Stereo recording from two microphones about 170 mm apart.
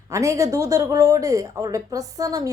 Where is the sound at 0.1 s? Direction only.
20° right (ahead or behind).